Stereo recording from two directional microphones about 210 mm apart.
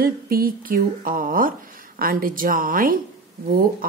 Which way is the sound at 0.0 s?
45° right (ahead or behind).